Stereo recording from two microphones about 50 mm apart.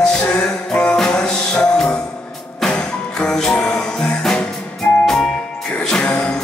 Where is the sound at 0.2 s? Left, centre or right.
Centre.